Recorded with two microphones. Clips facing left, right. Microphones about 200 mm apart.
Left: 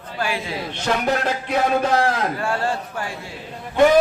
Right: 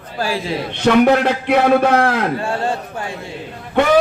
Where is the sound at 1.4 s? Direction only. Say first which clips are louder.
Right 7 dB; 75° right (ahead or behind).